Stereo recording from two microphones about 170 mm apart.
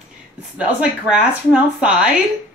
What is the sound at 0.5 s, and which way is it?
A woman's voice, 5° right (ahead or behind).